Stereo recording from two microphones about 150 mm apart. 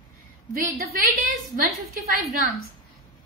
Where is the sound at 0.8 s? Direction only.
75° right (ahead or behind).